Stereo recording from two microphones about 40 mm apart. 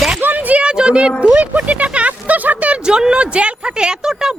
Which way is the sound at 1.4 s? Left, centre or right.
Right.